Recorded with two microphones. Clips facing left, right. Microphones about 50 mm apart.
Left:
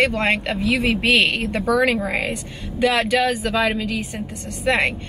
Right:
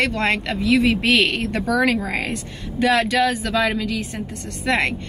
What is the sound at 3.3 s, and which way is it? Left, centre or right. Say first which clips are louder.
A woman's voice: even; left.